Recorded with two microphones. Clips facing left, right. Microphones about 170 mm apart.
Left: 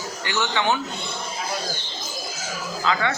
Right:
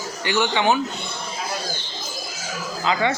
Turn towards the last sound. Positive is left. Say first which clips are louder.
# right 2 dB
turn(degrees=-20)  # may be behind; listen again after turning